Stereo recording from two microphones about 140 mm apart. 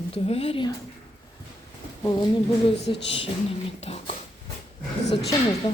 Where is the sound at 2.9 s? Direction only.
35° left (ahead or behind).